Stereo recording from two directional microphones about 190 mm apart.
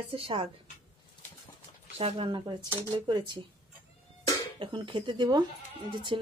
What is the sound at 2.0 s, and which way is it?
Speech, 30° right (ahead or behind).